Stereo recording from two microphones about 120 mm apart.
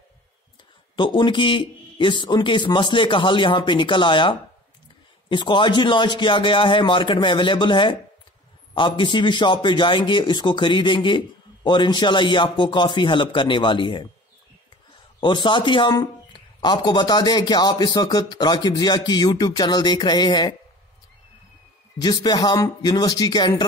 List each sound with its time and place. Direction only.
0.9 s a man's voice: 45° left (ahead or behind)
15.1 s a man's voice: 45° left (ahead or behind)
21.9 s speech: 35° left (ahead or behind)